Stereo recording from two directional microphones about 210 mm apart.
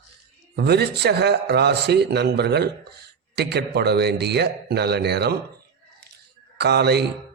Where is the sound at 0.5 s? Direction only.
50° right (ahead or behind).